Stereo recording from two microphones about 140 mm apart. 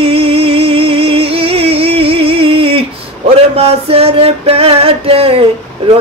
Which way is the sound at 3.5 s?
45° right (ahead or behind).